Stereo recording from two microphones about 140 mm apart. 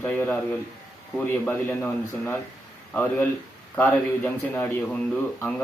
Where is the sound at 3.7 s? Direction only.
15° left (ahead or behind).